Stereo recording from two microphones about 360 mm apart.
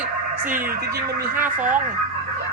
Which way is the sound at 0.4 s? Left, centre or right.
Centre.